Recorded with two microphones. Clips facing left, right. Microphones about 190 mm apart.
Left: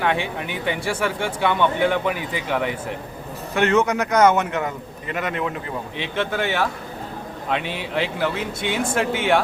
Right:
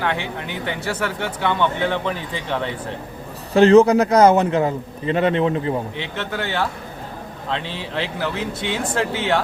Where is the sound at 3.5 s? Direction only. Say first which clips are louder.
Right 8 dB; 30° right (ahead or behind).